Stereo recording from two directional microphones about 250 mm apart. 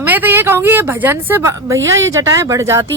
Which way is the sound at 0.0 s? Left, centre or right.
Centre.